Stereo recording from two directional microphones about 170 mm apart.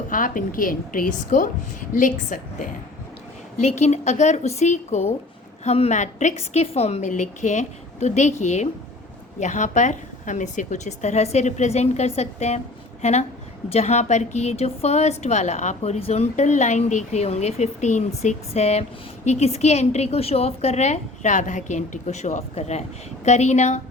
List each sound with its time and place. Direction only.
0.1 s a woman's voice: 50° left (ahead or behind)
3.6 s a woman's voice: 40° left (ahead or behind)